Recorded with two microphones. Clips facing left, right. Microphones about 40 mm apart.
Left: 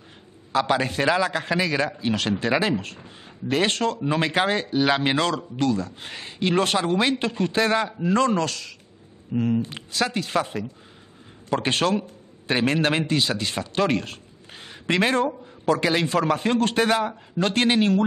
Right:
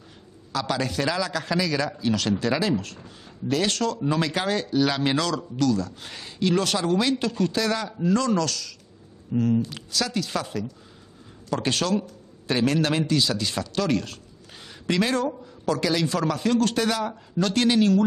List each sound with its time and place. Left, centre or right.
0.5 s a man's voice: left